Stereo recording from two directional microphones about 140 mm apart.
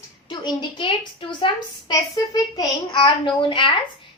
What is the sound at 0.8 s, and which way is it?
A woman's voice, 35° left (ahead or behind).